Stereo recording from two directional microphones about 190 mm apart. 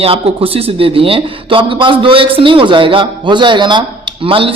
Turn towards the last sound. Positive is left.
turn(degrees=-30)  # may be behind; listen again after turning